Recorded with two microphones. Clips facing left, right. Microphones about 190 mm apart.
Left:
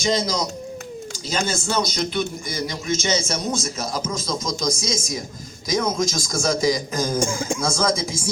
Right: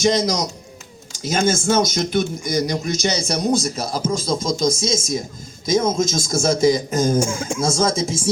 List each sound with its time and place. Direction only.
0.0 s a man's voice: 45° right (ahead or behind); by 7.2 s 25° right (ahead or behind)
7.2 s speech: 5° right (ahead or behind)
7.6 s a man's voice: 25° right (ahead or behind)